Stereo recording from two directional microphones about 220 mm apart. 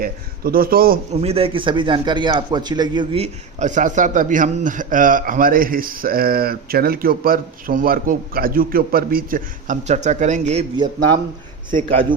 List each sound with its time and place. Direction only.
0.0 s a man's voice: 40° right (ahead or behind)
1.1 s a man's voice: 25° right (ahead or behind)